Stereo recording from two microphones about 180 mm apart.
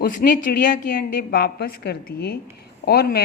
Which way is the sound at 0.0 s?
50° left (ahead or behind).